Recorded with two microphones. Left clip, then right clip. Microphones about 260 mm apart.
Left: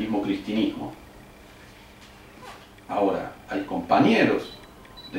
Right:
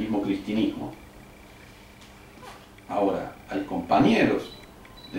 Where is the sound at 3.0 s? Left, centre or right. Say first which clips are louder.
Left 2 dB; centre.